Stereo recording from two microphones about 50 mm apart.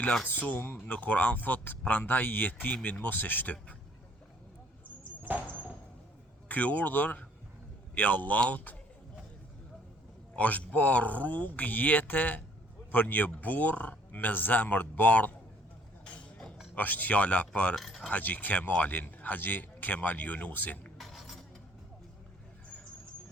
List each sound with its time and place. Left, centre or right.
0.3 s speech: left
5.2 s a sound: right
6.5 s speech: left
10.3 s speech: left
16.7 s speech: left
17.7 s speech: centre
18.1 s speech: left
21.0 s a sound: centre